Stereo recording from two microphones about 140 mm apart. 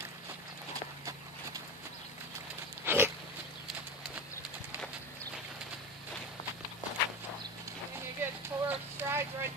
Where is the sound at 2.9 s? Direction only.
15° right (ahead or behind).